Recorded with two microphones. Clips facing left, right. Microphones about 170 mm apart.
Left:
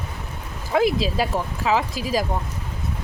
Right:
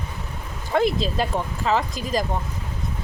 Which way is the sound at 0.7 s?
5° left (ahead or behind).